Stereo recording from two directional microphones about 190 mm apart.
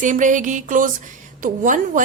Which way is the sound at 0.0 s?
40° right (ahead or behind).